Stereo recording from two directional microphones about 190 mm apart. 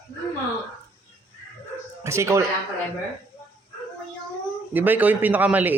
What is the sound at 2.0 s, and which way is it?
Speech, 15° right (ahead or behind).